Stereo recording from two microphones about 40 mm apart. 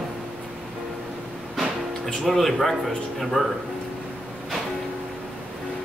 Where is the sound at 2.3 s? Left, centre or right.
Centre.